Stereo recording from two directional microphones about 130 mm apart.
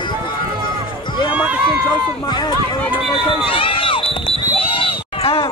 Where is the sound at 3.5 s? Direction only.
40° left (ahead or behind).